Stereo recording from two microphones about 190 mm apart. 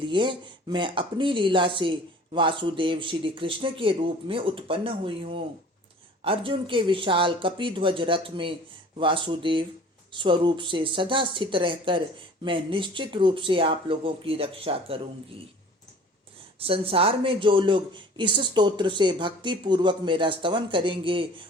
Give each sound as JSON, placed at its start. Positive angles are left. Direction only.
{"t": 0.0, "sound": "speech", "side_deg": -25}
{"t": 16.6, "sound": "speech", "side_deg": -30}